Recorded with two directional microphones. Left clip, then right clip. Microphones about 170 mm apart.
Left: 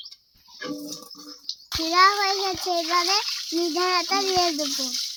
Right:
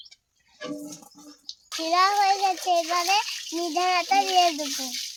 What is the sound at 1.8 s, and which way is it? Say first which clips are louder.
A child's voice: left 2 dB; 5° right (ahead or behind).